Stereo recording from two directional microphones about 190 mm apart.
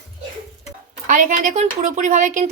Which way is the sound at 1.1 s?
45° right (ahead or behind).